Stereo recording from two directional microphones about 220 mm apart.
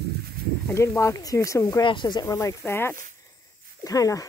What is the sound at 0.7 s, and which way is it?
Speech, 15° left (ahead or behind).